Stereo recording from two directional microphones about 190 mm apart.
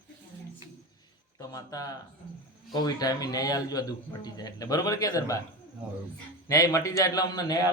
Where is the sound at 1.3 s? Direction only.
20° left (ahead or behind).